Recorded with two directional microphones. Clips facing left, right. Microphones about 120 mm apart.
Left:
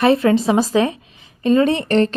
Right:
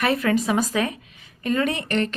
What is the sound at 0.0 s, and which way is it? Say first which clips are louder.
Speech: left 7 dB; 25° left (ahead or behind).